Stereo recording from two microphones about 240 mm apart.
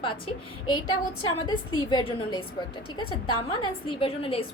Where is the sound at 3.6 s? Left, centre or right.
Left.